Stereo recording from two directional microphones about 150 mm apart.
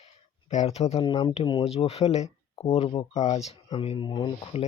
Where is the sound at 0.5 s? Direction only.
45° left (ahead or behind).